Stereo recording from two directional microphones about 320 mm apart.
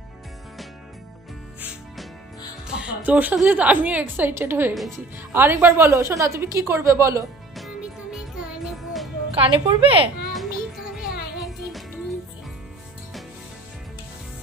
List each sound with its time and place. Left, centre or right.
1.6 s music: centre
2.7 s a woman's voice: centre
9.3 s a woman's voice: centre
10.3 s music: centre